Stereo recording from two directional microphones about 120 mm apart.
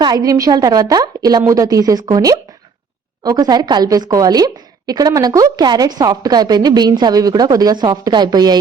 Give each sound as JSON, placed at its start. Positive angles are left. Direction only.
{"t": 0.0, "sound": "a woman's voice", "side_deg": -35}